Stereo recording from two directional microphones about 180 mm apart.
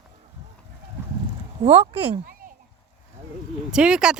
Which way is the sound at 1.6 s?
35° right (ahead or behind).